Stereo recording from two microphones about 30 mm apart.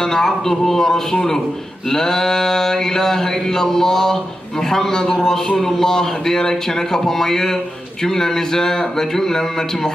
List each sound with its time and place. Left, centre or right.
0.0 s speech: centre